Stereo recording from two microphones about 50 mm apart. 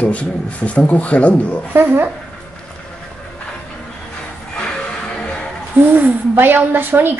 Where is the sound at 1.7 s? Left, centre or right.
Right.